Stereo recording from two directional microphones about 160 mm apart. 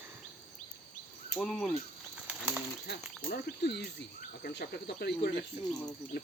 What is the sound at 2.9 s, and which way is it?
Speech, 90° left.